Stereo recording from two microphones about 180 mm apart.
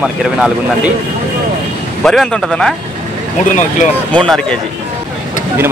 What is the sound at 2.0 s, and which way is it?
Speech, 5° left (ahead or behind).